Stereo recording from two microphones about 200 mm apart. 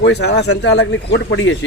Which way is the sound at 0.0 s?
55° left (ahead or behind).